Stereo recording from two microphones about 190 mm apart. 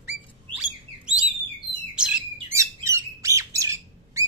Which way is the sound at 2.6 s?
15° right (ahead or behind).